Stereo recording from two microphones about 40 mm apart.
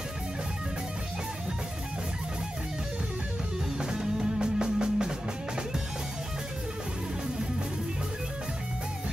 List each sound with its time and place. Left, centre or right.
3.8 s music: centre